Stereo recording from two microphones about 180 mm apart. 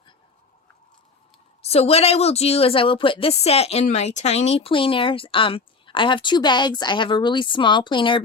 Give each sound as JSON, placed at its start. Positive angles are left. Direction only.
{"t": 1.6, "sound": "speech", "side_deg": 35}